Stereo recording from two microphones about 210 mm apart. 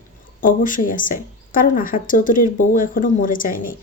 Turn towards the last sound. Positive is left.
turn(degrees=40)  # may be behind; listen again after turning